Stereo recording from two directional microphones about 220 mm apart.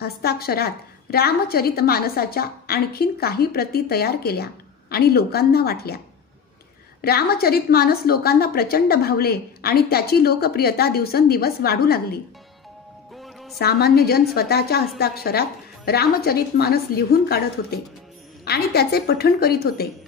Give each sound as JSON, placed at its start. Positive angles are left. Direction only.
{"t": 0.0, "sound": "a woman's voice", "side_deg": 45}
{"t": 7.0, "sound": "a woman's voice", "side_deg": 45}
{"t": 13.2, "sound": "music", "side_deg": 0}
{"t": 13.6, "sound": "a woman's voice", "side_deg": 45}